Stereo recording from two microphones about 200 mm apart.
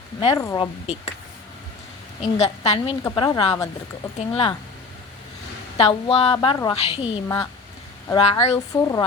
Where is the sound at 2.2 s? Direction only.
35° left (ahead or behind).